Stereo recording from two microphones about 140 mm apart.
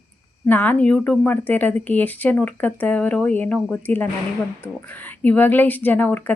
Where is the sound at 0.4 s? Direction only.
10° left (ahead or behind).